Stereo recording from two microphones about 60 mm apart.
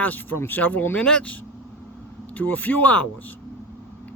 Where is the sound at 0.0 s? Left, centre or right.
Left.